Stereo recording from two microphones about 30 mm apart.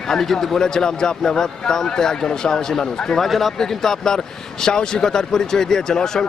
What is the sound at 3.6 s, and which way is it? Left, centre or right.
Speech, centre.